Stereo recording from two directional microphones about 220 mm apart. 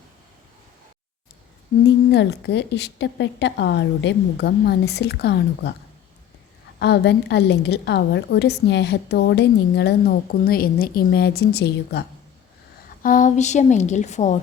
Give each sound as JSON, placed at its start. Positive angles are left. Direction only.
{"t": 2.0, "sound": "a woman's voice", "side_deg": 50}
{"t": 6.7, "sound": "a woman's voice", "side_deg": 50}
{"t": 13.0, "sound": "a woman's voice", "side_deg": 35}